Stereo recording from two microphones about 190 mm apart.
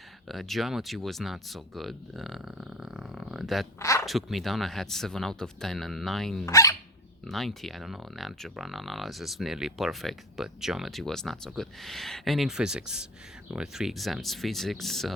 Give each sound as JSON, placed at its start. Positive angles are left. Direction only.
{"t": 0.3, "sound": "speech", "side_deg": 0}
{"t": 3.8, "sound": "speech", "side_deg": 15}
{"t": 4.0, "sound": "speech", "side_deg": 0}
{"t": 6.4, "sound": "speech", "side_deg": 15}
{"t": 7.3, "sound": "speech", "side_deg": 0}